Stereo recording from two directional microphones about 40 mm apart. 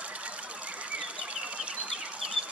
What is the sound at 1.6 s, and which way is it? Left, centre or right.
Bird, right.